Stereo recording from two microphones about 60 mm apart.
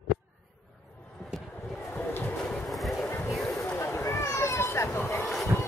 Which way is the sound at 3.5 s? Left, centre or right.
Left.